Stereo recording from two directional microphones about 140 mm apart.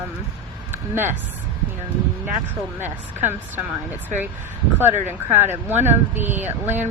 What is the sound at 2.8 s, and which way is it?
Speech, 15° right (ahead or behind).